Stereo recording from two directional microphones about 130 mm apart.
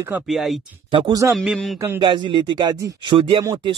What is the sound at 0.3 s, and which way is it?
A man's voice, centre (ahead or behind).